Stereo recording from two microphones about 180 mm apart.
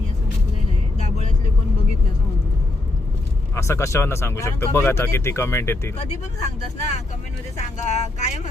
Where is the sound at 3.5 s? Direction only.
15° left (ahead or behind).